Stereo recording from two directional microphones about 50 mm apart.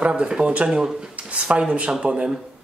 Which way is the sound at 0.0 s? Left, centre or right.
Right.